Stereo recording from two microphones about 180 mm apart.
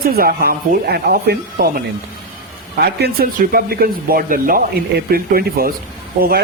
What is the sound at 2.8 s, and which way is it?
Speech, 60° right (ahead or behind).